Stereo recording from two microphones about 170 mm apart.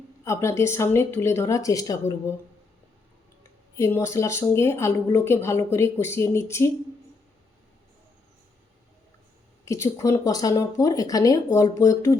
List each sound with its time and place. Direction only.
0.3 s speech: 15° left (ahead or behind)
3.8 s speech: 15° left (ahead or behind)
9.6 s speech: 15° left (ahead or behind)